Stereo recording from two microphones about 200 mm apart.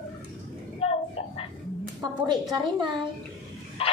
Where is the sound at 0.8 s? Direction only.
30° left (ahead or behind).